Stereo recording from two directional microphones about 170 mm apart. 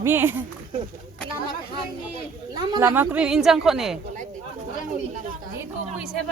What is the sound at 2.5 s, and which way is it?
Speech, 25° right (ahead or behind).